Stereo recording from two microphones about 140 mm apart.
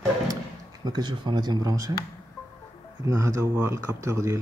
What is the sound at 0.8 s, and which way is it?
Speech, 30° right (ahead or behind).